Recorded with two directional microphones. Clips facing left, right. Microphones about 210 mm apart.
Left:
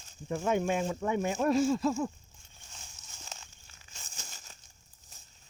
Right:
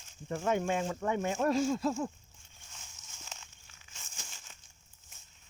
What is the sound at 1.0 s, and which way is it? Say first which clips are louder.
Speech: left 1 dB; 15° left (ahead or behind).